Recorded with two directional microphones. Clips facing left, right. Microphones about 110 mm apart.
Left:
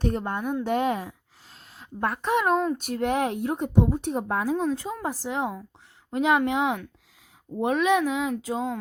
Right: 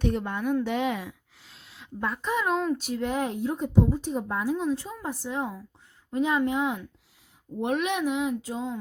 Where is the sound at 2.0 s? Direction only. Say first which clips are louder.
Left 4 dB; 65° left (ahead or behind).